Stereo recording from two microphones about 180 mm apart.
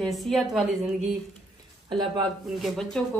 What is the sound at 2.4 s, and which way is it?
Speech, centre (ahead or behind).